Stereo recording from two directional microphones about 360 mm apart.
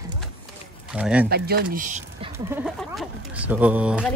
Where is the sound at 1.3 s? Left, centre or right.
Right.